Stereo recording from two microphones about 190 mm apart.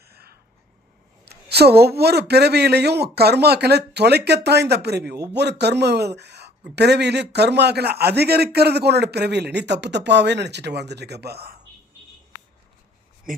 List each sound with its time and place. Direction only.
0.1 s a sound: 55° right (ahead or behind)
1.2 s speech: 60° right (ahead or behind)
13.3 s speech: 45° right (ahead or behind)